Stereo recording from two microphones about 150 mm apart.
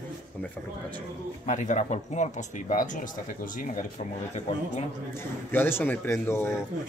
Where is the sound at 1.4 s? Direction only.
55° left (ahead or behind).